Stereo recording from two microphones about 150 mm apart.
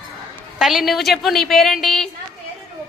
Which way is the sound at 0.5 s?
Centre (ahead or behind).